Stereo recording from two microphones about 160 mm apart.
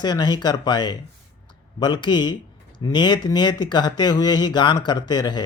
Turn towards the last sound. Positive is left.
turn(degrees=25)  # may be behind; listen again after turning